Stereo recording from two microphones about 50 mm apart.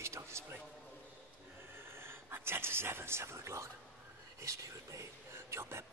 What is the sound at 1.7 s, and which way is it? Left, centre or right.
Speech, right.